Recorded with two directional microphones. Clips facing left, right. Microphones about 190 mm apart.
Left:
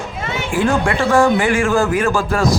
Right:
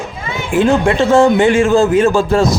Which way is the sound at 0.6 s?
20° right (ahead or behind).